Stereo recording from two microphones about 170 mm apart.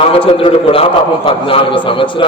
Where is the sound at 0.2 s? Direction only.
35° left (ahead or behind).